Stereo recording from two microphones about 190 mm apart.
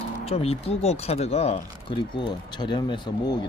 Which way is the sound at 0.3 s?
30° left (ahead or behind).